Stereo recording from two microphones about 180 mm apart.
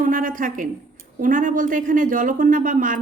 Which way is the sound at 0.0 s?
50° right (ahead or behind).